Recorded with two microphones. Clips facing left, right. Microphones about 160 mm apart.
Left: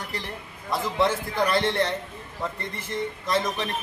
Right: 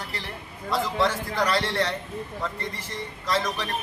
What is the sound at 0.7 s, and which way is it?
A man's voice, 20° left (ahead or behind).